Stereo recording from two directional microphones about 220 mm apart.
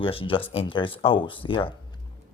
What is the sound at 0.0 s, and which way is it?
A man's voice, 25° left (ahead or behind).